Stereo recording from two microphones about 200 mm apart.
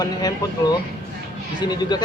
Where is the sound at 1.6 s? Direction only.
20° left (ahead or behind).